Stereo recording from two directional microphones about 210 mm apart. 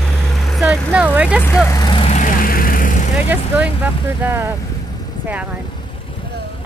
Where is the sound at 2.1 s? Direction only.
40° left (ahead or behind).